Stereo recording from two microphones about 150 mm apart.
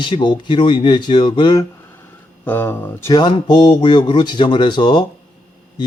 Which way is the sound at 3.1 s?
30° left (ahead or behind).